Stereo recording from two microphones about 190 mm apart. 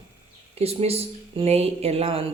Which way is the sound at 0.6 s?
30° right (ahead or behind).